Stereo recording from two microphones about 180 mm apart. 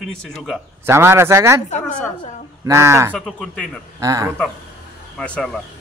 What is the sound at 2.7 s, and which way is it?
Speech, 15° right (ahead or behind).